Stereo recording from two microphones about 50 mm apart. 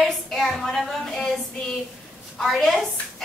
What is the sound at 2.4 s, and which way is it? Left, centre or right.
Speech, centre.